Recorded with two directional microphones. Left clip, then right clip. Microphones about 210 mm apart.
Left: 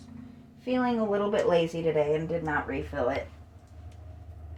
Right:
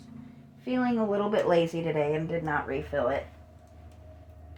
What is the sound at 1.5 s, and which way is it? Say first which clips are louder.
A woman's voice: even; 40° right (ahead or behind).